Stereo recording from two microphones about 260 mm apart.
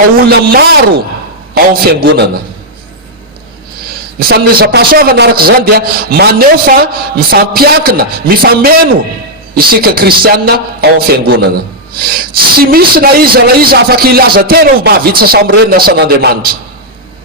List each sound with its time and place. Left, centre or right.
0.3 s a man's voice: right
4.2 s a man's voice: right